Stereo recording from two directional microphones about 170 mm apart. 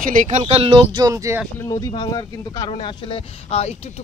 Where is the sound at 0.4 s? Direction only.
35° right (ahead or behind); by 1.4 s 20° right (ahead or behind).